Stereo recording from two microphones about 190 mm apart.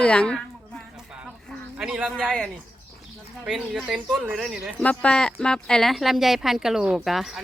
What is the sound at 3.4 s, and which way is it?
Speech, centre (ahead or behind).